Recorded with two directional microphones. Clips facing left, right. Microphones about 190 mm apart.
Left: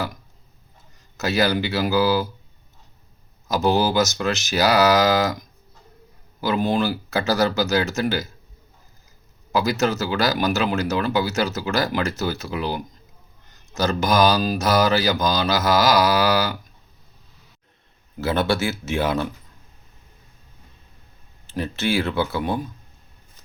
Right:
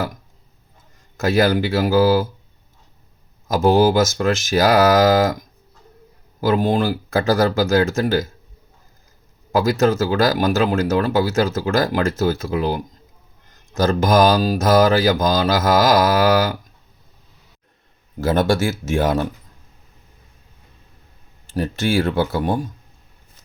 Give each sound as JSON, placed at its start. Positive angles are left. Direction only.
{"t": 1.1, "sound": "speech", "side_deg": -50}
{"t": 3.5, "sound": "speech", "side_deg": -50}
{"t": 6.4, "sound": "speech", "side_deg": -50}
{"t": 9.5, "sound": "speech", "side_deg": -50}
{"t": 18.2, "sound": "speech", "side_deg": -45}
{"t": 21.5, "sound": "speech", "side_deg": -45}